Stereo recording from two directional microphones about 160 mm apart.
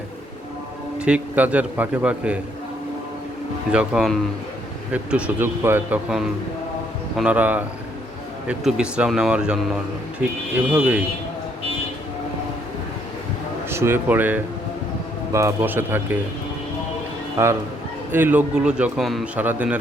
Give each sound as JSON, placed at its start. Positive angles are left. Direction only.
{"t": 0.9, "sound": "a man's voice", "side_deg": -5}
{"t": 3.7, "sound": "a man's voice", "side_deg": -5}
{"t": 13.7, "sound": "a man's voice", "side_deg": -15}
{"t": 17.3, "sound": "a man's voice", "side_deg": -20}